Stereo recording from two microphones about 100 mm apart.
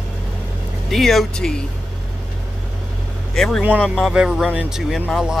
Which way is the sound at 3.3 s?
5° left (ahead or behind).